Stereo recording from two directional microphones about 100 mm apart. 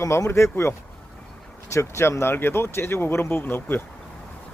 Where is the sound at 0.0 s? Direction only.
30° left (ahead or behind).